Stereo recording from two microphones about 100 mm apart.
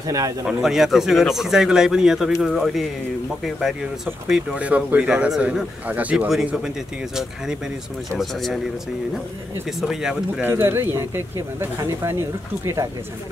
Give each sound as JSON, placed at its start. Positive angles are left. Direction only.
{"t": 0.0, "sound": "speech", "side_deg": -35}
{"t": 0.5, "sound": "speech", "side_deg": -5}
{"t": 4.6, "sound": "speech", "side_deg": -15}
{"t": 8.2, "sound": "speech", "side_deg": 0}
{"t": 9.8, "sound": "speech", "side_deg": -5}
{"t": 10.4, "sound": "speech", "side_deg": -25}